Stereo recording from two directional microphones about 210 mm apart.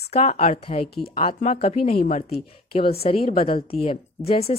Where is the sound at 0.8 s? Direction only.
50° left (ahead or behind).